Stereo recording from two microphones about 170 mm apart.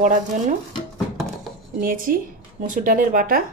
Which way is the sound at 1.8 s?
55° right (ahead or behind).